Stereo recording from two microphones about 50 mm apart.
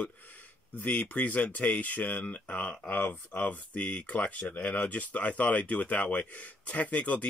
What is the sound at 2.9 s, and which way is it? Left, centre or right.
Speech, left.